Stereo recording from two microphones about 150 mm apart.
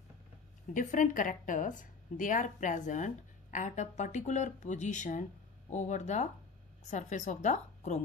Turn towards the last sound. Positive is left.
turn(degrees=50)  # may be behind; listen again after turning